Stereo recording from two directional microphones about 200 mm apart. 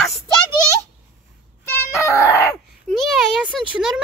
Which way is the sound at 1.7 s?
15° left (ahead or behind).